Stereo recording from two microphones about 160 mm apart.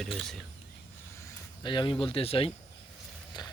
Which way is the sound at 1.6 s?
30° left (ahead or behind).